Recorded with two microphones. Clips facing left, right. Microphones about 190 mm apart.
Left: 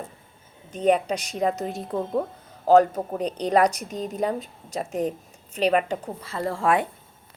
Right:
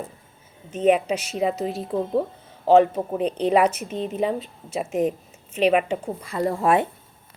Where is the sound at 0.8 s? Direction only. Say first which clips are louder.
Right 2 dB; 5° right (ahead or behind).